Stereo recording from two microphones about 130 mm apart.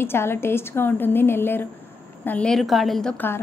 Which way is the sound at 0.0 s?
20° left (ahead or behind).